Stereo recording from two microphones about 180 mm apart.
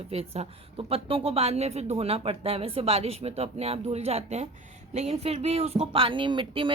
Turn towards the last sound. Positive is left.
turn(degrees=-30)  # may be behind; listen again after turning